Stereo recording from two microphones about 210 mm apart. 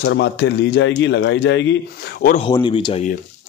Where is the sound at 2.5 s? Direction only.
25° left (ahead or behind).